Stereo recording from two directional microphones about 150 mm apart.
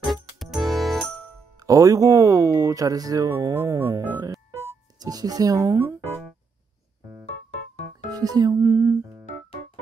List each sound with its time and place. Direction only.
0.0 s music: centre (ahead or behind)
1.6 s speech: 20° right (ahead or behind)
8.1 s speech: 25° right (ahead or behind)